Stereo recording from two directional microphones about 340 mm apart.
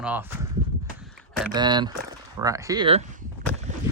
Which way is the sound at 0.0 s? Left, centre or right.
Centre.